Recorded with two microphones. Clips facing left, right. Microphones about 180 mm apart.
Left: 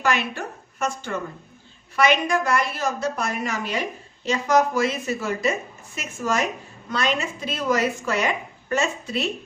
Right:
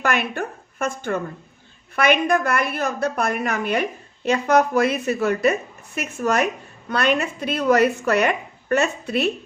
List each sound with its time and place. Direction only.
0.0 s a woman's voice: 55° right (ahead or behind)